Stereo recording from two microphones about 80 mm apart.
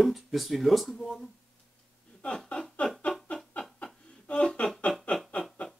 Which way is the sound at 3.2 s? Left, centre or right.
Centre.